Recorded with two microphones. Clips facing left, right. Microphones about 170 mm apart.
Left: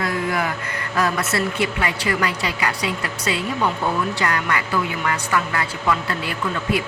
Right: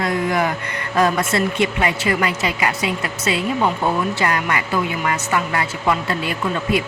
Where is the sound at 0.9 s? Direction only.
25° right (ahead or behind).